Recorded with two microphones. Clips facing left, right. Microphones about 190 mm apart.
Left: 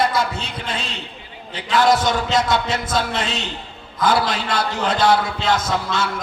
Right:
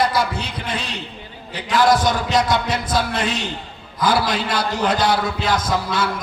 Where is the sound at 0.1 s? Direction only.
25° left (ahead or behind).